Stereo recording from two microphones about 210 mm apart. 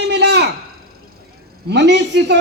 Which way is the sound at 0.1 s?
55° right (ahead or behind).